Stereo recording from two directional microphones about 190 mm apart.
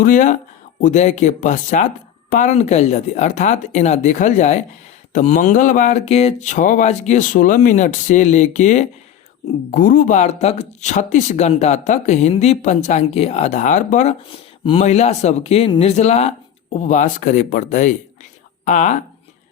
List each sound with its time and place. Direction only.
0.0 s speech: 40° left (ahead or behind)